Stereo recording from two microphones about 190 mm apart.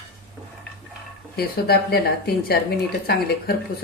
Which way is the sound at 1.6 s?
55° left (ahead or behind).